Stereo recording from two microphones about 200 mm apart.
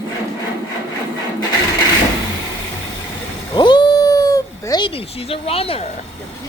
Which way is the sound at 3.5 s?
25° left (ahead or behind).